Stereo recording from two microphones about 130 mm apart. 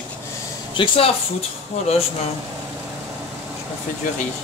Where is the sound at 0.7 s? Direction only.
45° left (ahead or behind).